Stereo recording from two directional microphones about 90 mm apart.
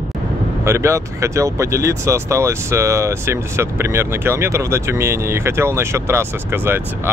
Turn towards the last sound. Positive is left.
turn(degrees=-25)  # may be behind; listen again after turning